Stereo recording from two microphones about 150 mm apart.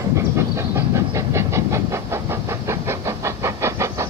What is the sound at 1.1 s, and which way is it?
Vehicle, 20° right (ahead or behind).